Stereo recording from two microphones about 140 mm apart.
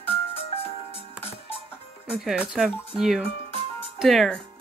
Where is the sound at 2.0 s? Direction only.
5° right (ahead or behind).